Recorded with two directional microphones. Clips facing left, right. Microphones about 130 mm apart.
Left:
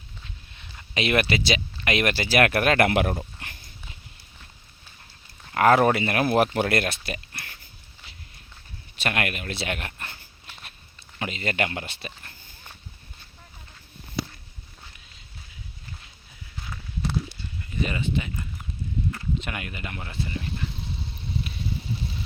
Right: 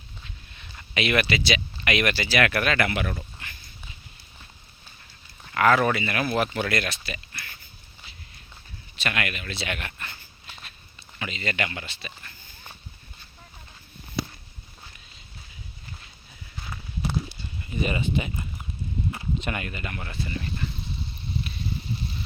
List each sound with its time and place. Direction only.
0.9 s speech: 40° left (ahead or behind); by 3.2 s 60° left (ahead or behind)
3.4 s a sound: 60° left (ahead or behind)
5.5 s speech: 45° left (ahead or behind)
9.0 s speech: 50° left (ahead or behind)
11.2 s speech: 50° left (ahead or behind)
17.7 s speech: 15° right (ahead or behind)
19.4 s speech: 5° left (ahead or behind)